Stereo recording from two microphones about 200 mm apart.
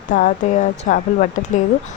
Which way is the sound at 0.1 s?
40° left (ahead or behind).